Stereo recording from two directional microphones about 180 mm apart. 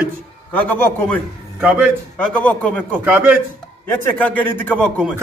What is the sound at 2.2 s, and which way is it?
Speech, 5° left (ahead or behind).